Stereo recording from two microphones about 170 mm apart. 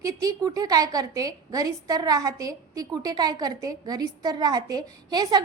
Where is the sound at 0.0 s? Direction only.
20° right (ahead or behind).